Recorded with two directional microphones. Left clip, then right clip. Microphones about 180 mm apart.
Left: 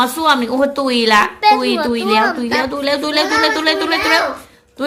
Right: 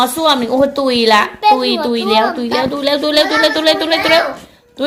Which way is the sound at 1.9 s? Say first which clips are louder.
Right 2 dB; 20° right (ahead or behind).